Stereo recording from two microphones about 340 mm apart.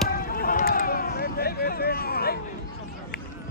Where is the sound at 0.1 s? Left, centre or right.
Left.